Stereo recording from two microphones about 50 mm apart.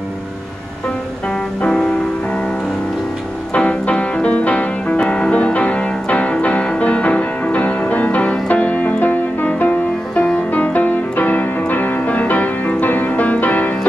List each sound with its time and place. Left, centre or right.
1.6 s music: centre
3.5 s music: left
10.1 s music: left